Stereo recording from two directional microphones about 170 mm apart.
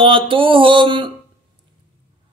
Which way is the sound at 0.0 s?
30° right (ahead or behind).